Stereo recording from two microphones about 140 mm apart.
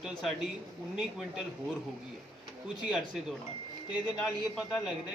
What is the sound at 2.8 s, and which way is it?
Speech, 5° right (ahead or behind).